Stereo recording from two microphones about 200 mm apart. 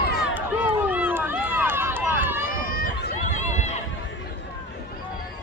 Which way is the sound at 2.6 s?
45° left (ahead or behind).